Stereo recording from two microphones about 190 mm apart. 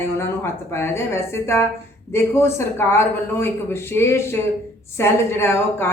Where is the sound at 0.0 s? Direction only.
15° left (ahead or behind).